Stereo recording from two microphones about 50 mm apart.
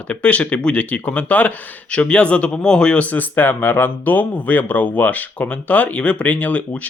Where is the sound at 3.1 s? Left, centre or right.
Left.